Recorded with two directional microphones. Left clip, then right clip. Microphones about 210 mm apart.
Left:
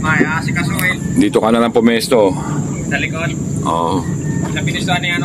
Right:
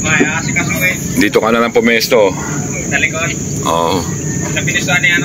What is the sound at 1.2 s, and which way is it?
Speech, 10° left (ahead or behind).